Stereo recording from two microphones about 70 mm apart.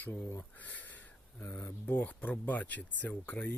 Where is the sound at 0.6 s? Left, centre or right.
Left.